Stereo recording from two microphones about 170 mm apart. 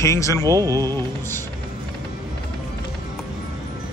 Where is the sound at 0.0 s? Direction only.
20° left (ahead or behind).